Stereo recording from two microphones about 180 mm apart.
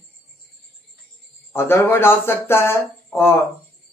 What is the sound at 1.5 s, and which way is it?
Speech, 15° left (ahead or behind).